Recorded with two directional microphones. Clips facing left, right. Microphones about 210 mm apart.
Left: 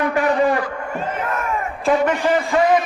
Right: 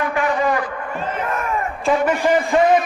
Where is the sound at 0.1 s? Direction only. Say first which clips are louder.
Left 2 dB; 40° left (ahead or behind).